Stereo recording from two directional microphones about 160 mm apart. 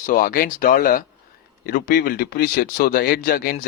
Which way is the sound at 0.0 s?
55° left (ahead or behind).